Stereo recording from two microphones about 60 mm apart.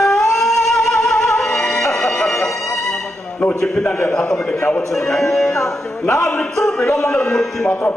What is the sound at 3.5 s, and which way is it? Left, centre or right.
A man's voice, centre.